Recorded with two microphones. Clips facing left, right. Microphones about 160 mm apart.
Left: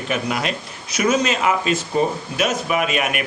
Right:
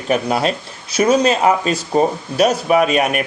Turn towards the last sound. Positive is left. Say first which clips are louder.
# right 6 dB
turn(degrees=-35)  # may be behind; listen again after turning